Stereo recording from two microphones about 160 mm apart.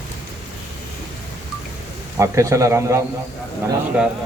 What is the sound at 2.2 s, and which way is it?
Speech, 20° right (ahead or behind).